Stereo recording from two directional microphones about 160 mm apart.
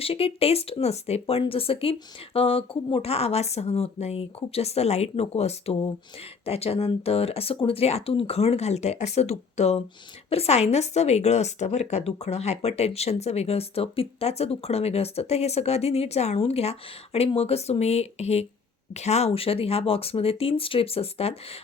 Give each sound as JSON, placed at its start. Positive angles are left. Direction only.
{"t": 0.0, "sound": "speech", "side_deg": 35}